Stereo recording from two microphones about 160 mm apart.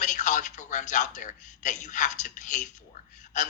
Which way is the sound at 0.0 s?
50° left (ahead or behind).